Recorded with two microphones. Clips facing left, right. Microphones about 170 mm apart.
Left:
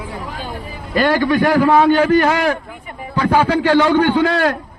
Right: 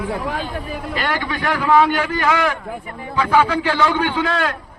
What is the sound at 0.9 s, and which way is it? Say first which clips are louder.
A man's voice: left 10 dB; 40° left (ahead or behind).